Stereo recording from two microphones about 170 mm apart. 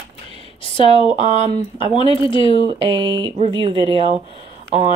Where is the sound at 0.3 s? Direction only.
30° left (ahead or behind).